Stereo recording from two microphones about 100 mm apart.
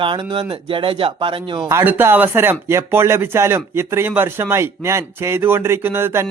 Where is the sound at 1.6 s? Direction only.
20° right (ahead or behind).